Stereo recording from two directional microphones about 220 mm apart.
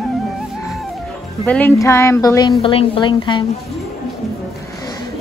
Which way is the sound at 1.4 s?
5° left (ahead or behind).